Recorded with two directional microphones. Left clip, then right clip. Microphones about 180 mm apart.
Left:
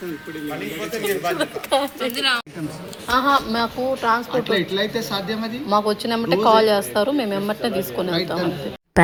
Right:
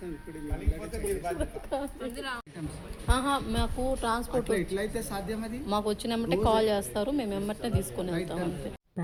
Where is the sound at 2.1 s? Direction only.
50° right (ahead or behind).